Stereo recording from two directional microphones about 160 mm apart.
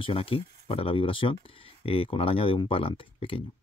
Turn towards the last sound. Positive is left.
turn(degrees=35)  # may be behind; listen again after turning